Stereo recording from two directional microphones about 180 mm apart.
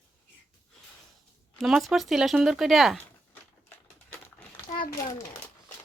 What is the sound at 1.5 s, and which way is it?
Speech, centre (ahead or behind).